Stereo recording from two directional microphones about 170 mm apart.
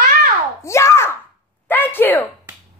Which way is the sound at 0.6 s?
15° left (ahead or behind).